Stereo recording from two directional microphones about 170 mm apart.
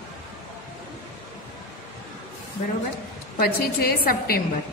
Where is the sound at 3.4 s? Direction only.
65° left (ahead or behind).